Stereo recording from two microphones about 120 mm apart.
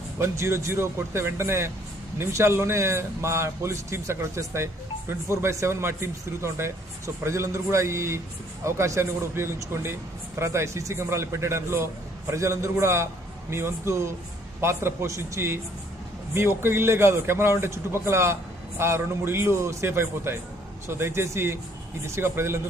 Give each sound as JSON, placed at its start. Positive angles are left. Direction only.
{"t": 0.2, "sound": "a man's voice", "side_deg": -20}
{"t": 16.6, "sound": "a man's voice", "side_deg": -20}